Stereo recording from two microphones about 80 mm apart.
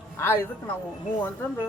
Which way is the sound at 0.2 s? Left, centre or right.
Left.